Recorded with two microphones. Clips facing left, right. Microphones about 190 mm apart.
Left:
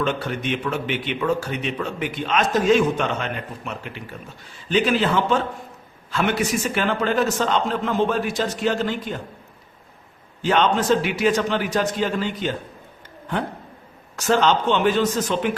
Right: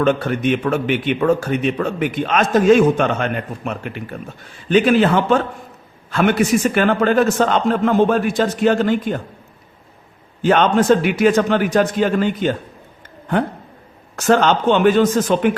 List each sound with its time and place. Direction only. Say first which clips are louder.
0.0 s a man's voice: right 7 dB; 50° right (ahead or behind)
10.4 s a man's voice: right 5 dB; 50° right (ahead or behind)
14.2 s a man's voice: right 4 dB; 55° right (ahead or behind)